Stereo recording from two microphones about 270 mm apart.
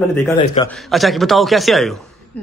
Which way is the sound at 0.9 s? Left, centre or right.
Centre.